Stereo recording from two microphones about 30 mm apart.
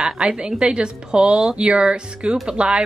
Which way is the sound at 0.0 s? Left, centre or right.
Right.